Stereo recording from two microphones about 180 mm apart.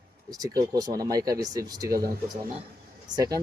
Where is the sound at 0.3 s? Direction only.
20° right (ahead or behind).